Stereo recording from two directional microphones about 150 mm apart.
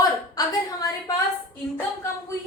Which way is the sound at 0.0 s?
25° left (ahead or behind).